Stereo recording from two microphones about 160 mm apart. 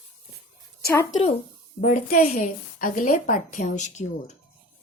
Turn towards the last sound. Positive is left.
turn(degrees=50)  # may be behind; listen again after turning